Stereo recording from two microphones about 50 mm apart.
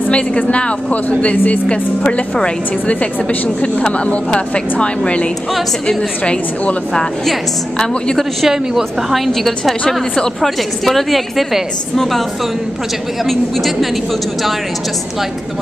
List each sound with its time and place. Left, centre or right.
0.4 s a woman's voice: left
1.7 s a woman's voice: left
6.9 s a woman's voice: centre
8.5 s a woman's voice: centre
13.2 s a woman's voice: centre